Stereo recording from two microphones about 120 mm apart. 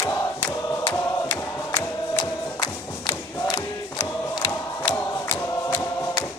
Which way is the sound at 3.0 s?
30° left (ahead or behind).